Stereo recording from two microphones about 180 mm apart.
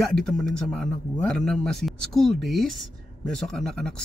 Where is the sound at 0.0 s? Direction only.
Centre (ahead or behind).